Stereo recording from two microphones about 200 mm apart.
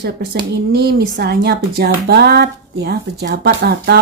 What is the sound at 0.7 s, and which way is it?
Speech, 55° right (ahead or behind).